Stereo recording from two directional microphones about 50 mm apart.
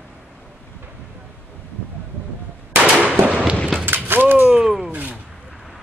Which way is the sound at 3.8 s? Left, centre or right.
Right.